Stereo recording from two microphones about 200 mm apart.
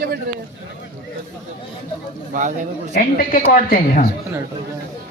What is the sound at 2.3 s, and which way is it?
Speech, 40° right (ahead or behind).